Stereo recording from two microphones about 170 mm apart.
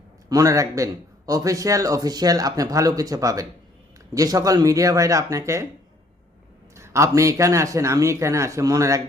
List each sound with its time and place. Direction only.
0.3 s speech: 20° right (ahead or behind)
6.7 s a man's voice: 15° right (ahead or behind)